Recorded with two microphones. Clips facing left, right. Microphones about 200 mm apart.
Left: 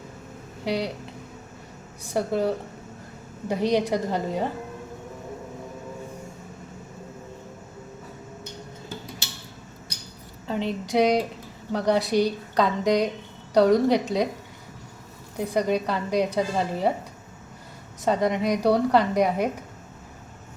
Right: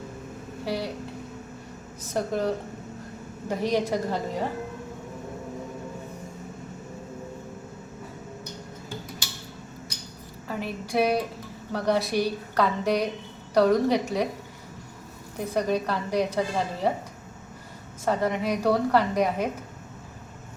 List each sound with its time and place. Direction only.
0.6 s speech: 15° left (ahead or behind)
2.0 s a woman's voice: 15° left (ahead or behind)
3.5 s a woman's voice: 15° left (ahead or behind)
10.5 s a sound: 25° left (ahead or behind)
11.7 s a woman's voice: 15° left (ahead or behind)
15.4 s a woman's voice: 15° left (ahead or behind)
18.0 s a woman's voice: 15° left (ahead or behind)